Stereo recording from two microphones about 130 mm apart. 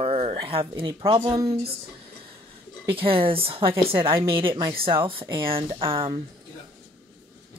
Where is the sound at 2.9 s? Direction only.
45° right (ahead or behind).